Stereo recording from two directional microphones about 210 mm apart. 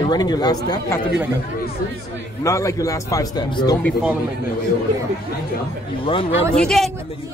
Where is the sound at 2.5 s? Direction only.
15° left (ahead or behind).